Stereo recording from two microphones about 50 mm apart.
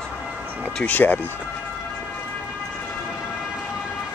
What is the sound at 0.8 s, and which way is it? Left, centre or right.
Speech, left.